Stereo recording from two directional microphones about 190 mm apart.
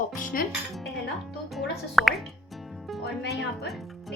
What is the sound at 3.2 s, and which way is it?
Speech, 60° left (ahead or behind).